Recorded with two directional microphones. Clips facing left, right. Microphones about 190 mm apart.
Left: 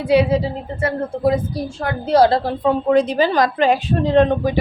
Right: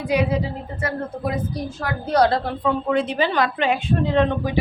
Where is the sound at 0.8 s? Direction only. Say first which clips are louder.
Left 6 dB; 30° left (ahead or behind).